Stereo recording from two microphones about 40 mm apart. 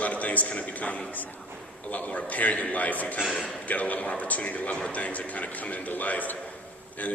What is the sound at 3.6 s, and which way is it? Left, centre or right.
Speech, left.